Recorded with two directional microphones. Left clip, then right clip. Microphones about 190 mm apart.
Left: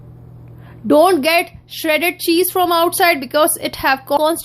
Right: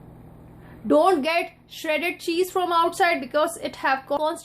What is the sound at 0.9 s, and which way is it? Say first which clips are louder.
A woman's voice: left 7 dB; 35° left (ahead or behind).